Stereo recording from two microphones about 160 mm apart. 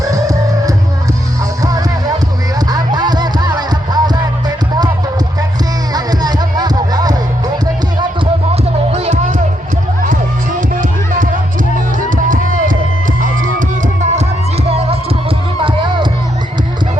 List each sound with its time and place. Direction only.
0.1 s music: 20° right (ahead or behind)
5.9 s music: 25° right (ahead or behind)
8.9 s music: 40° right (ahead or behind)
12.1 s music: 55° right (ahead or behind); by 16.0 s 30° right (ahead or behind)